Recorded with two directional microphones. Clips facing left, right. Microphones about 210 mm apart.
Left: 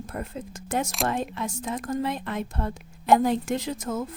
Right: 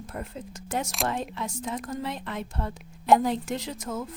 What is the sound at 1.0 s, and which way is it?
Speech, 50° left (ahead or behind).